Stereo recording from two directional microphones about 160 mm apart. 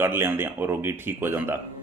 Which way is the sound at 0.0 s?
15° right (ahead or behind).